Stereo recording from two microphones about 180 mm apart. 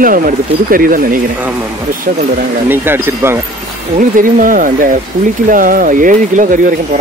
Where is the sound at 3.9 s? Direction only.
50° right (ahead or behind).